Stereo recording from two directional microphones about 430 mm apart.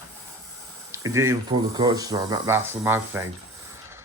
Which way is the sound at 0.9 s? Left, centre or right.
Centre.